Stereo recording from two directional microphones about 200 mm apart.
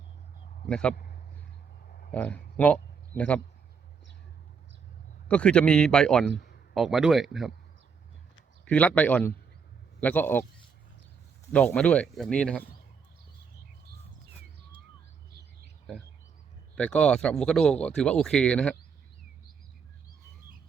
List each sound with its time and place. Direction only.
0.7 s speech: 5° left (ahead or behind)
2.1 s speech: 5° left (ahead or behind)
5.3 s speech: 5° left (ahead or behind)
8.6 s speech: 5° left (ahead or behind)
11.5 s speech: 5° left (ahead or behind)
16.7 s speech: 5° left (ahead or behind)